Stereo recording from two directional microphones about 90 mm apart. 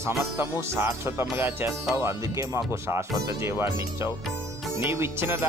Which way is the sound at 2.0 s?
35° right (ahead or behind).